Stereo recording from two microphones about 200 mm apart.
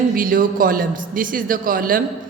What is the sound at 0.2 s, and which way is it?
A man's voice, 45° right (ahead or behind).